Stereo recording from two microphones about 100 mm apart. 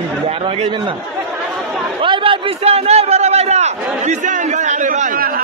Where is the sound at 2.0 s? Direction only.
60° right (ahead or behind); by 3.7 s 90° right.